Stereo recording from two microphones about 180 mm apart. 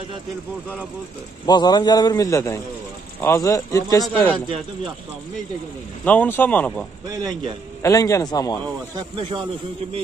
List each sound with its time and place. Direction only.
1.4 s a man's voice: 25° left (ahead or behind)
6.0 s a man's voice: 10° left (ahead or behind)
7.2 s speech: 20° right (ahead or behind)
7.8 s a man's voice: 15° left (ahead or behind)
8.9 s speech: 25° right (ahead or behind)